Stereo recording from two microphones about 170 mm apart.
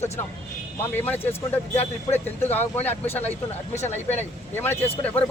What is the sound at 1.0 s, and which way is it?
Speech, 10° left (ahead or behind).